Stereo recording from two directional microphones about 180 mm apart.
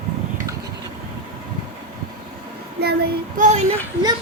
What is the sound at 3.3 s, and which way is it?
Female singing, 45° right (ahead or behind).